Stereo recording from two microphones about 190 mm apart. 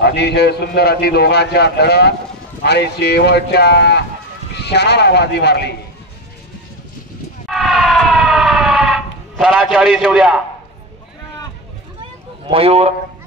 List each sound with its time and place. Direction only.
0.0 s a man's voice: 60° left (ahead or behind)
7.4 s siren: centre (ahead or behind)
12.4 s speech: 30° right (ahead or behind)